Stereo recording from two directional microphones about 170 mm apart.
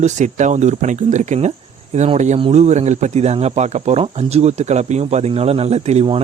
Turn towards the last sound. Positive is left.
turn(degrees=-40)  # may be behind; listen again after turning